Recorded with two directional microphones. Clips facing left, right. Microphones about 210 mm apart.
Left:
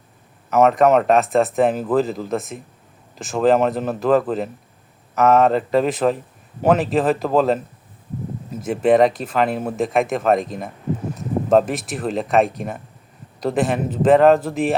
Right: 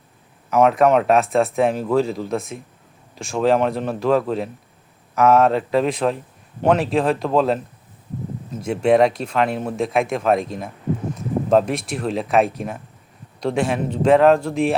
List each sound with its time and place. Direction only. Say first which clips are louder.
0.5 s a man's voice: left 1 dB; centre (ahead or behind)
8.6 s a man's voice: left 1 dB; centre (ahead or behind)